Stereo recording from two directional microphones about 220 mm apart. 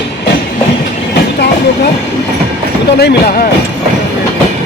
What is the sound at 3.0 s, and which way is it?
Speech, 45° left (ahead or behind).